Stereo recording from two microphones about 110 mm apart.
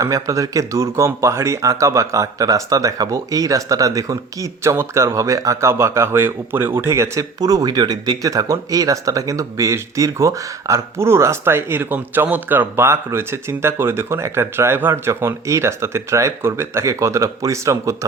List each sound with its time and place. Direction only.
0.0 s speech: 30° right (ahead or behind)